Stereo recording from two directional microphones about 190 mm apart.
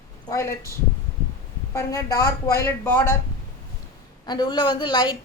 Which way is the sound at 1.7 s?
15° left (ahead or behind).